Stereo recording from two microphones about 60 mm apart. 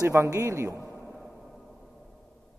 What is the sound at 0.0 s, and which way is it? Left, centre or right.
Speech, right.